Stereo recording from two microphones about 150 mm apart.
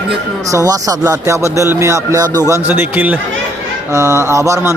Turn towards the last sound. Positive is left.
turn(degrees=-20)  # may be behind; listen again after turning